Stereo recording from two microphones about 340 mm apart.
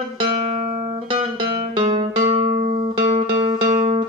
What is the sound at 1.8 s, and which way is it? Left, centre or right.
Music, centre.